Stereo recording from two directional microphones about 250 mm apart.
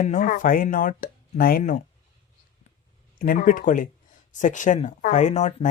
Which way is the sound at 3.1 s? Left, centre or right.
Left.